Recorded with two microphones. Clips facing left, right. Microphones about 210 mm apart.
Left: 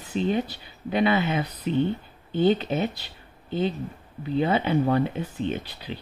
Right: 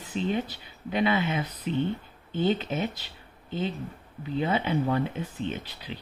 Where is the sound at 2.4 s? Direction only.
35° left (ahead or behind).